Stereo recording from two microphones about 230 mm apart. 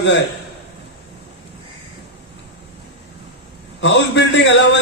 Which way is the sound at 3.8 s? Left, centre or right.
Left.